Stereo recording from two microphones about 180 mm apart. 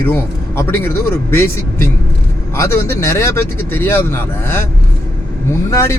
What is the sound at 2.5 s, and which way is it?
Speech, 15° left (ahead or behind).